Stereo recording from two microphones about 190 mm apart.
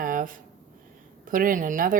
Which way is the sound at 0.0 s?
45° right (ahead or behind).